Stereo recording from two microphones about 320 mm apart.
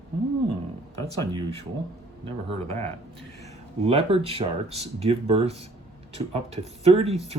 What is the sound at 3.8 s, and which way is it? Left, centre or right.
Speech, centre.